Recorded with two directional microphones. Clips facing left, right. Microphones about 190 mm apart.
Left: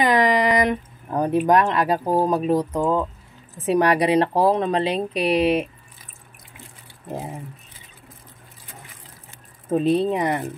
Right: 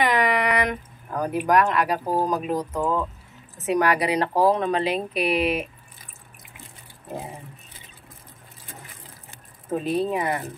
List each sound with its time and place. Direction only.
0.0 s speech: 35° left (ahead or behind)
9.7 s speech: 30° left (ahead or behind)